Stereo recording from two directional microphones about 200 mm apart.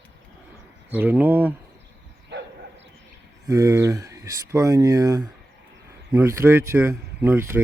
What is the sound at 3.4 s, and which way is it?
Speech, 15° right (ahead or behind).